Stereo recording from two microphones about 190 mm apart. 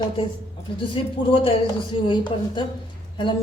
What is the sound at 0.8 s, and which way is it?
Speech, 25° left (ahead or behind).